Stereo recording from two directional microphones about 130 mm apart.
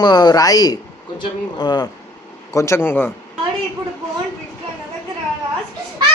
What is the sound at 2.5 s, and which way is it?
Speech, 20° left (ahead or behind).